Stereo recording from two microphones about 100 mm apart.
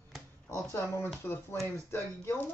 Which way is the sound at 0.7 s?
25° left (ahead or behind).